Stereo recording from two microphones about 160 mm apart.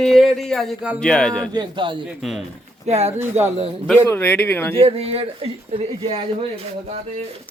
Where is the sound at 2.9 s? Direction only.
45° right (ahead or behind).